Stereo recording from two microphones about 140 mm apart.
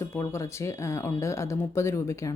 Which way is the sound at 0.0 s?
20° left (ahead or behind).